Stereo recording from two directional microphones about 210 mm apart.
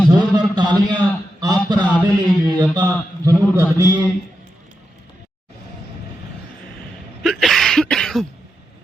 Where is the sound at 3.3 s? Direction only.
15° right (ahead or behind).